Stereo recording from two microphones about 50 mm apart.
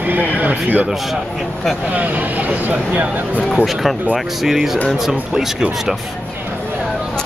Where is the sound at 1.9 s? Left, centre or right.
Right.